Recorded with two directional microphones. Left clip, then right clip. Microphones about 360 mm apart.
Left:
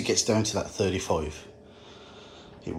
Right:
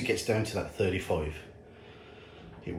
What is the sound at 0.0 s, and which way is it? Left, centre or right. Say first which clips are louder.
Speech: left 4 dB; centre.